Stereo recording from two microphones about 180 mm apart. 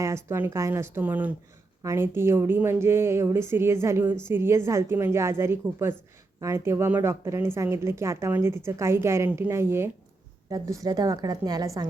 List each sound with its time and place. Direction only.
0.0 s a woman's voice: 15° right (ahead or behind)